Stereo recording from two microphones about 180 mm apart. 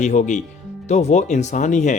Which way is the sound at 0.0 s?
40° left (ahead or behind).